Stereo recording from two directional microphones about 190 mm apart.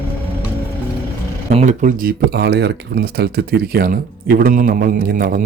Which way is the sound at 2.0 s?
60° right (ahead or behind).